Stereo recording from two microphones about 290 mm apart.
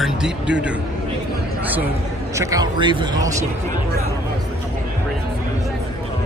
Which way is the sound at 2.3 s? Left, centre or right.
Centre.